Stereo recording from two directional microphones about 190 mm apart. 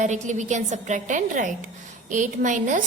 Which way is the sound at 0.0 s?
40° right (ahead or behind).